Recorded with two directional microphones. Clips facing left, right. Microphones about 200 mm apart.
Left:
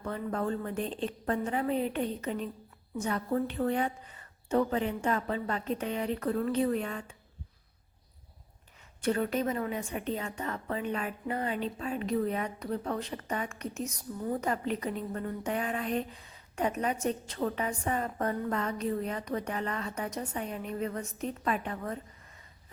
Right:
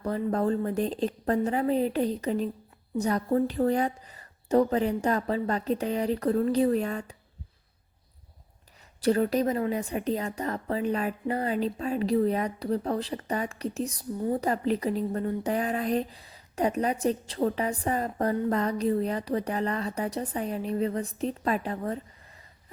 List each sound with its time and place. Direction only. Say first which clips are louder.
0.0 s a woman's voice: right 6 dB; 35° right (ahead or behind)
9.0 s a woman's voice: right 5 dB; 35° right (ahead or behind)